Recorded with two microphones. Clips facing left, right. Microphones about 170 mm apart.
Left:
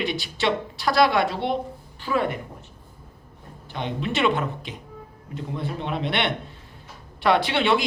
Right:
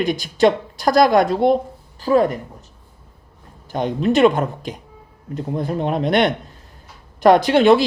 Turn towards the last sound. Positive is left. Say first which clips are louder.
# right 9 dB
turn(degrees=-45)  # may be behind; listen again after turning